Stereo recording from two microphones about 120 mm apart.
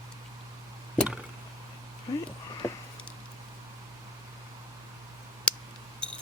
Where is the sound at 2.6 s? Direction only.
20° left (ahead or behind).